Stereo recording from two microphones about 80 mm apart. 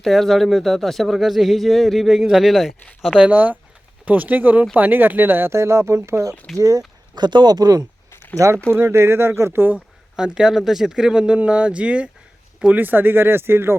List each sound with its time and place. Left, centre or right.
0.0 s speech: centre; by 6.8 s right
7.2 s speech: right
8.1 s a sound: left
8.7 s speech: right
9.7 s speech: centre; by 13.7 s right